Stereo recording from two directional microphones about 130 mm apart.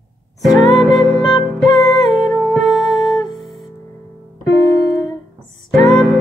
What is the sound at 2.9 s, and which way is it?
Music, 35° left (ahead or behind).